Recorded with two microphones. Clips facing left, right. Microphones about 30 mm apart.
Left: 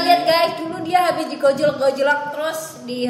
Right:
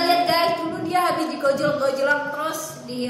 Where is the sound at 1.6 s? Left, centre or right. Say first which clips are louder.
Left 4 dB; left.